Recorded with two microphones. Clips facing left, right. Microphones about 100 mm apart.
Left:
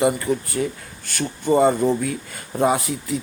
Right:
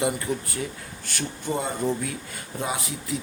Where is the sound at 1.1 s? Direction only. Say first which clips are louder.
Left 10 dB; 55° left (ahead or behind).